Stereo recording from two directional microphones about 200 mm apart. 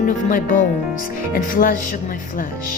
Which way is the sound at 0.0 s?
40° left (ahead or behind).